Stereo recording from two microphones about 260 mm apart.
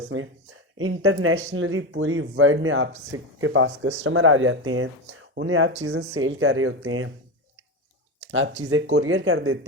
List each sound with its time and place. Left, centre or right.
0.1 s speech: right
8.3 s speech: right